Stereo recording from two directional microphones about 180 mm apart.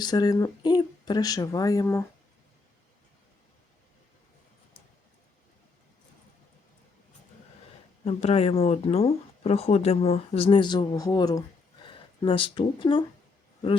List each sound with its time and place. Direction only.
0.0 s speech: 20° left (ahead or behind)
8.0 s speech: 35° left (ahead or behind)